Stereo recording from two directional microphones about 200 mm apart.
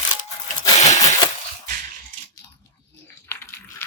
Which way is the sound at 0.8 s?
35° left (ahead or behind).